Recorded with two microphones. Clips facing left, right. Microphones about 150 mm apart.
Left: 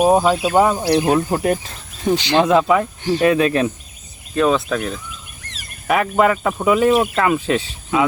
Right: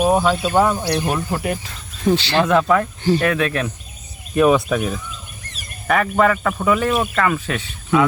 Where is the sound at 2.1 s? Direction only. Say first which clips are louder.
Left 2 dB; 15° left (ahead or behind).